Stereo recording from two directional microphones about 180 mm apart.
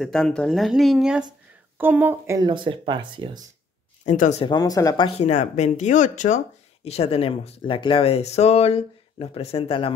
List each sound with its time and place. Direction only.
0.0 s speech: 5° left (ahead or behind); by 3.4 s 25° right (ahead or behind)
4.0 s speech: 40° left (ahead or behind)
4.5 s speech: 20° left (ahead or behind)
5.0 s speech: 35° left (ahead or behind)